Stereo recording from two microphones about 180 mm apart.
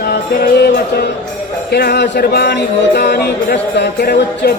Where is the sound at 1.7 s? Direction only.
65° left (ahead or behind).